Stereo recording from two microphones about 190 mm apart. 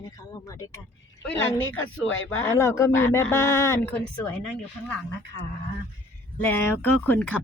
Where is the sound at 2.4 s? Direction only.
15° left (ahead or behind).